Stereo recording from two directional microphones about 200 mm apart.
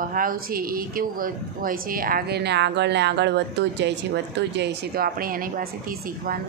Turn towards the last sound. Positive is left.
turn(degrees=-45)  # may be behind; listen again after turning